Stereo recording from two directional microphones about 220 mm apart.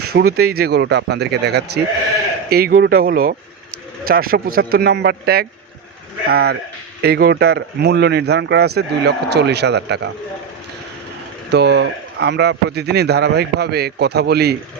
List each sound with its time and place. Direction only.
0.3 s speech: 45° right (ahead or behind)
11.5 s speech: 50° right (ahead or behind)